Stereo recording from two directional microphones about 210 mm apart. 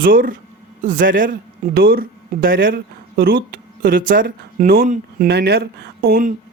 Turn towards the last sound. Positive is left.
turn(degrees=-45)  # may be behind; listen again after turning